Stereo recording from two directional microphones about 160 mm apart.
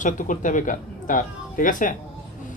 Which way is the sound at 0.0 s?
55° left (ahead or behind).